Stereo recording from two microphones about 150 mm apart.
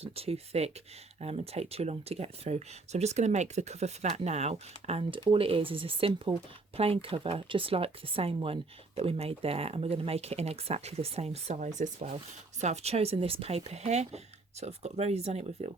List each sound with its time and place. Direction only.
0.0 s speech: 40° right (ahead or behind)